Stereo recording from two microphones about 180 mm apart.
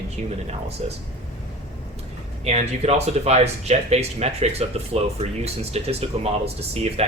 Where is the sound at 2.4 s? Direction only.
35° right (ahead or behind).